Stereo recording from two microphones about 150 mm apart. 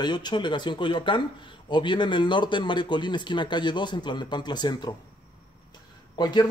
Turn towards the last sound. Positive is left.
turn(degrees=30)  # may be behind; listen again after turning